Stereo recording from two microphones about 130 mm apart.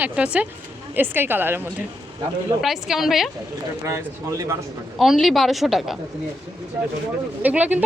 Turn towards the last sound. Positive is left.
turn(degrees=-10)  # may be behind; listen again after turning